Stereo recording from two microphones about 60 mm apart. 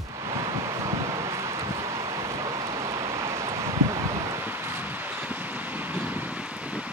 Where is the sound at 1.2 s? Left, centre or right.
Right.